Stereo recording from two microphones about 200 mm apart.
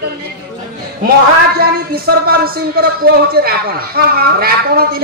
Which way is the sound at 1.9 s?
50° right (ahead or behind).